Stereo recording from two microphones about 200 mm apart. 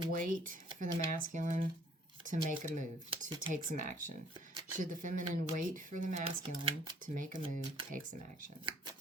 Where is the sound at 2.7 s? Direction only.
40° right (ahead or behind).